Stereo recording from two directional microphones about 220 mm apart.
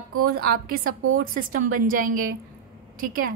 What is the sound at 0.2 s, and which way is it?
A woman's voice, 45° right (ahead or behind).